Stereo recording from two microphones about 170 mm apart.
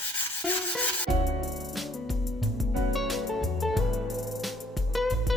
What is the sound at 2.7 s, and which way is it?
Music, centre (ahead or behind).